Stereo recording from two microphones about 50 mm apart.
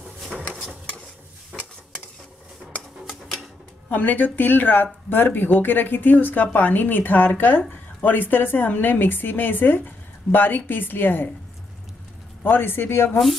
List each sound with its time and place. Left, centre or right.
1.5 s stir: centre
2.6 s a sound: centre
3.1 s typewriter: centre
3.9 s speech: left
12.4 s speech: left